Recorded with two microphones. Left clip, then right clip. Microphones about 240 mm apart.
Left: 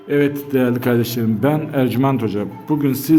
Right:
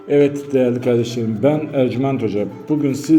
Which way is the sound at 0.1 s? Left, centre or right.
Centre.